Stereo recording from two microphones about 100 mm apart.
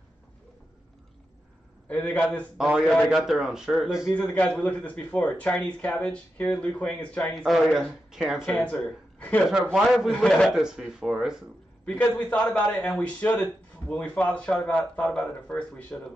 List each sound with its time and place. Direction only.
1.9 s a man's voice: 15° left (ahead or behind)
2.5 s speech: 5° right (ahead or behind)
4.1 s a man's voice: 15° left (ahead or behind)
7.4 s speech: 5° right (ahead or behind)
8.8 s speech: 15° left (ahead or behind)
9.7 s a man's voice: centre (ahead or behind)
10.5 s speech: 5° right (ahead or behind)
11.8 s a man's voice: 10° left (ahead or behind)